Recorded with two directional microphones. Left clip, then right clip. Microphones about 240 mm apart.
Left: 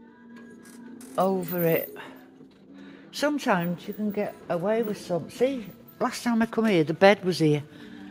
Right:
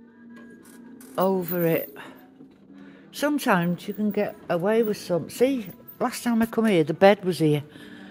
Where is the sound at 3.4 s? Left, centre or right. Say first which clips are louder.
Right 3 dB; centre.